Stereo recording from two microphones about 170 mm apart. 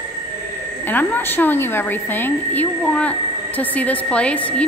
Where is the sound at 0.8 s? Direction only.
10° left (ahead or behind).